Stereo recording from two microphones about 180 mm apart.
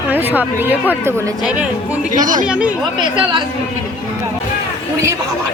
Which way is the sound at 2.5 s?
5° right (ahead or behind).